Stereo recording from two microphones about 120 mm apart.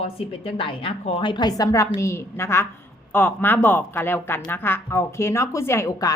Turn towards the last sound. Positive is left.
turn(degrees=30)  # may be behind; listen again after turning